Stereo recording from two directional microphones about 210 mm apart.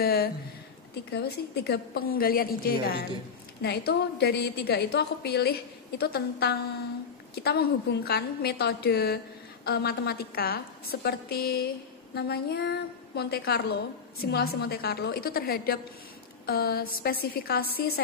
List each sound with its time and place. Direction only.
0.0 s a woman's voice: 45° left (ahead or behind)